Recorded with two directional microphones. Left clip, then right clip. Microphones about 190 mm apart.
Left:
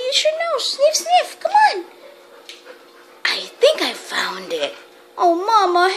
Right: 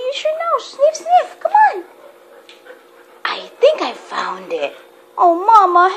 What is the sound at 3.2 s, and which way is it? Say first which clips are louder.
Cough: right 2 dB; 30° left (ahead or behind).